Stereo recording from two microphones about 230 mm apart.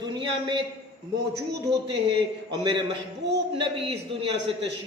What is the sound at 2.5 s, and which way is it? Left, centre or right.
Speech, centre.